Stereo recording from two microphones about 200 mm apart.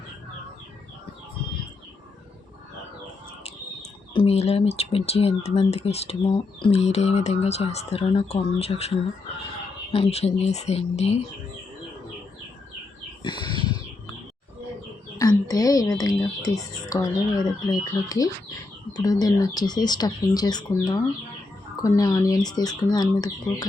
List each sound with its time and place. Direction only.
4.1 s speech: 30° left (ahead or behind)
9.9 s speech: 30° left (ahead or behind)
13.2 s a sound: 20° left (ahead or behind)
15.2 s speech: 20° left (ahead or behind)